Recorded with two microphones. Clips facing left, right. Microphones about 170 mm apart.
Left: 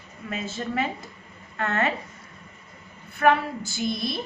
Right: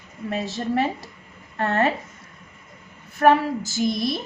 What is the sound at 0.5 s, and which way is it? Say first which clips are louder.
A woman's voice: right 4 dB; 35° right (ahead or behind).